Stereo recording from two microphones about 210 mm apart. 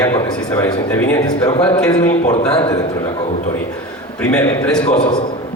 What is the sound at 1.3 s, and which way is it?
Speech, 25° left (ahead or behind).